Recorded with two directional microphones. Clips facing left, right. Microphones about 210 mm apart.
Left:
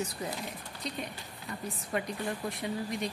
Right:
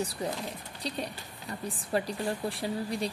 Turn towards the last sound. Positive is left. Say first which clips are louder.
# right 2 dB
turn(degrees=-30)  # may be behind; listen again after turning